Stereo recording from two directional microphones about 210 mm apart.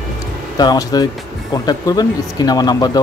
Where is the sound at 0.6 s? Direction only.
20° left (ahead or behind).